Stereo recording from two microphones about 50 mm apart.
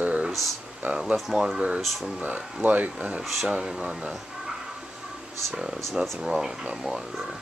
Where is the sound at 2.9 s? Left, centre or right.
Right.